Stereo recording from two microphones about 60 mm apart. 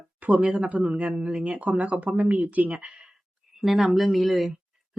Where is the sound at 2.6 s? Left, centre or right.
Centre.